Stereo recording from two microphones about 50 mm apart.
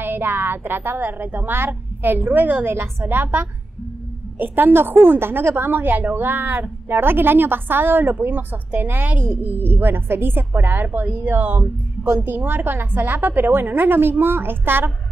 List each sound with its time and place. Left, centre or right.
0.0 s a woman's voice: right